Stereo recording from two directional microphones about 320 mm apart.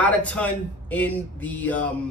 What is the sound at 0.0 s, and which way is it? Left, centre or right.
A man's voice, centre.